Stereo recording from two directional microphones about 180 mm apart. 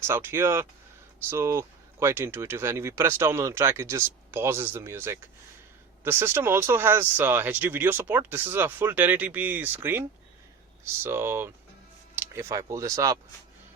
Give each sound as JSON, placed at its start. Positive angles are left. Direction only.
{"t": 0.1, "sound": "speech", "side_deg": -15}